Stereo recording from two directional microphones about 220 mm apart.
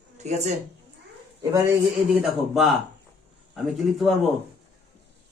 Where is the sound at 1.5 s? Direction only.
15° right (ahead or behind).